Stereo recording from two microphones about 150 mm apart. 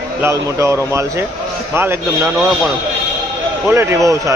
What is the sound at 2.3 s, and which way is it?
Speech, centre (ahead or behind).